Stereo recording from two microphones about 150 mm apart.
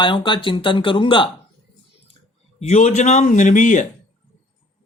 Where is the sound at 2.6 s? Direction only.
50° left (ahead or behind).